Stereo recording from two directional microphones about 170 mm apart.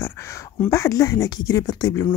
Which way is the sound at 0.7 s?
20° left (ahead or behind).